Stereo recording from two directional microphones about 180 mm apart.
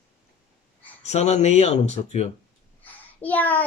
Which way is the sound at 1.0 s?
40° left (ahead or behind).